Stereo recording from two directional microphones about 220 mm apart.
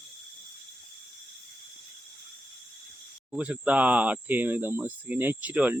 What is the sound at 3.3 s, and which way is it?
Speech, 5° right (ahead or behind).